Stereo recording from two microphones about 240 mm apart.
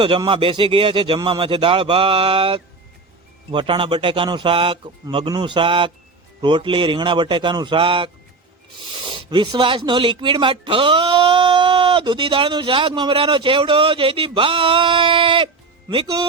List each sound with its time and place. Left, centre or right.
0.0 s speech: right
9.3 s speech: centre